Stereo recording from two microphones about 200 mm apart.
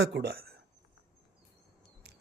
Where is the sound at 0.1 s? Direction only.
55° right (ahead or behind).